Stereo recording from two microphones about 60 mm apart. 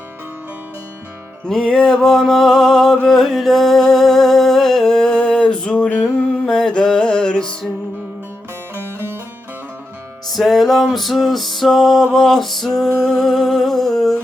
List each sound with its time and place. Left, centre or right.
1.5 s music: centre
8.7 s music: right
10.2 s music: centre